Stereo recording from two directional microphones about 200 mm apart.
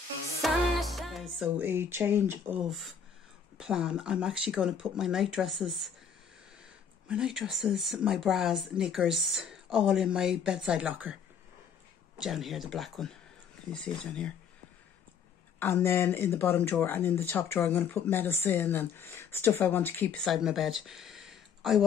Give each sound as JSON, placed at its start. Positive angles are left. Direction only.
{"t": 0.4, "sound": "music", "side_deg": 0}
{"t": 3.5, "sound": "speech", "side_deg": -5}
{"t": 7.1, "sound": "speech", "side_deg": -5}
{"t": 12.2, "sound": "speech", "side_deg": 0}
{"t": 15.6, "sound": "speech", "side_deg": 10}